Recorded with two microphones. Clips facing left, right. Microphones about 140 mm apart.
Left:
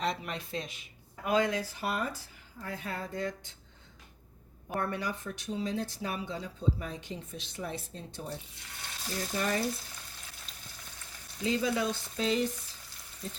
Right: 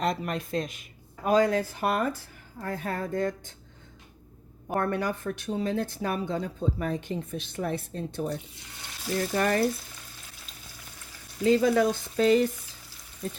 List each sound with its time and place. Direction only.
0.0 s speech: 45° right (ahead or behind)
4.7 s speech: 50° right (ahead or behind)
11.4 s speech: 50° right (ahead or behind)